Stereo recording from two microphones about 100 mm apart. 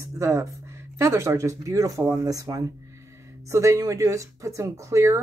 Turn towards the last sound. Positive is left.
turn(degrees=-30)  # may be behind; listen again after turning